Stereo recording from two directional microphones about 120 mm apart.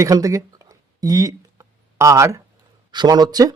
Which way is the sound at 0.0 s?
30° right (ahead or behind).